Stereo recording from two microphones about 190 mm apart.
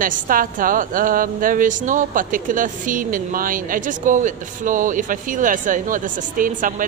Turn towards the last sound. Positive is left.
turn(degrees=-45)  # may be behind; listen again after turning